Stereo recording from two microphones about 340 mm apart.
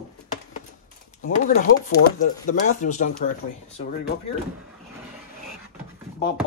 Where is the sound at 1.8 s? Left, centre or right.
Left.